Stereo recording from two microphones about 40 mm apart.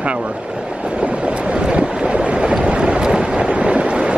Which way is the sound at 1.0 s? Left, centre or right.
Right.